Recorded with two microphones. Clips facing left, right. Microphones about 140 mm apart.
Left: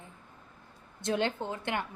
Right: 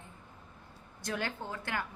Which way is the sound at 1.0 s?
25° left (ahead or behind).